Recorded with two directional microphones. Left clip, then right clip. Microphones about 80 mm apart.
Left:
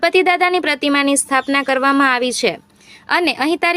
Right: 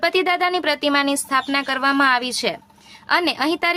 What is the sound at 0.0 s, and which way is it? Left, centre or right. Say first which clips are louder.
A woman's voice: left 5 dB; left.